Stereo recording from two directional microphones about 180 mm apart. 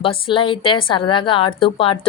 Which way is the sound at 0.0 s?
30° left (ahead or behind).